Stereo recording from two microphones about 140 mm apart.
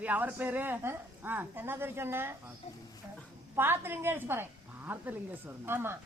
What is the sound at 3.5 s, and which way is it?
A woman's voice, 15° right (ahead or behind).